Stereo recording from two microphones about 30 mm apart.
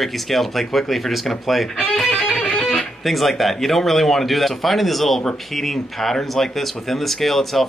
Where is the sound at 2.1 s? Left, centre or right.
Left.